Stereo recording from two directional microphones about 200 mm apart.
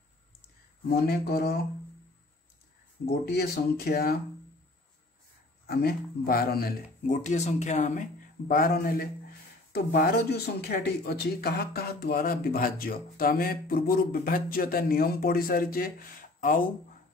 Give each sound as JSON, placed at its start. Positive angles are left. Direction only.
{"t": 0.8, "sound": "speech", "side_deg": 50}
{"t": 3.1, "sound": "speech", "side_deg": 50}
{"t": 5.7, "sound": "speech", "side_deg": 50}
{"t": 7.2, "sound": "a man's voice", "side_deg": 35}